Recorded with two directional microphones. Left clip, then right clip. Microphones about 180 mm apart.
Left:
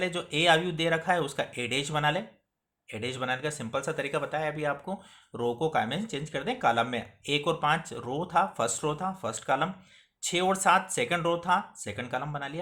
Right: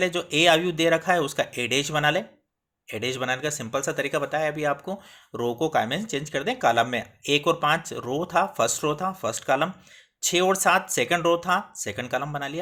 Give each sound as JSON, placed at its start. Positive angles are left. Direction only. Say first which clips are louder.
{"t": 0.0, "sound": "speech", "louder": "right 6 dB", "side_deg": -30}